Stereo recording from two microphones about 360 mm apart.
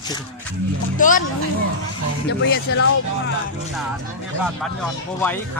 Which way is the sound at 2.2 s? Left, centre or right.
Left.